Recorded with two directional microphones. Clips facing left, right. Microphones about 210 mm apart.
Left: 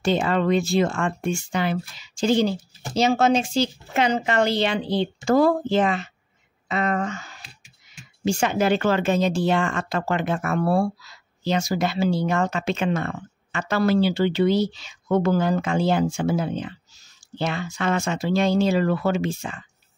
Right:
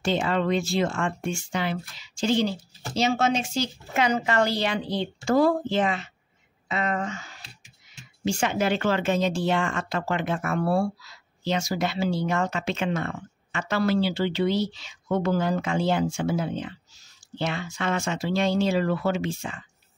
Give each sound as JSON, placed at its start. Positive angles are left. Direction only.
{"t": 0.0, "sound": "speech", "side_deg": 45}
{"t": 3.0, "sound": "speech", "side_deg": 35}
{"t": 5.3, "sound": "speech", "side_deg": 45}
{"t": 8.3, "sound": "speech", "side_deg": 40}